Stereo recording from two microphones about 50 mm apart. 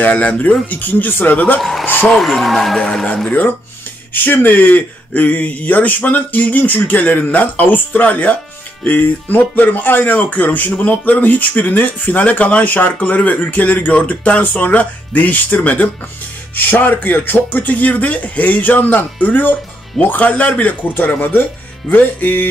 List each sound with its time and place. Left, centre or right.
0.0 s speech: left
1.6 s speech: centre
2.8 s speech: centre
3.3 s speech: left